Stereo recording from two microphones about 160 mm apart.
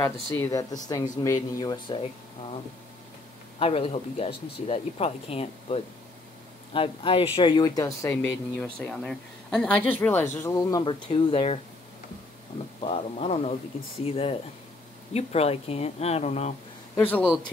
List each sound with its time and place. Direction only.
0.4 s speech: 20° left (ahead or behind)
3.5 s speech: 40° left (ahead or behind); by 8.2 s 20° left (ahead or behind)
8.2 s speech: 10° left (ahead or behind); by 11.6 s 35° left (ahead or behind)
12.8 s speech: 40° left (ahead or behind)
16.9 s speech: 10° left (ahead or behind)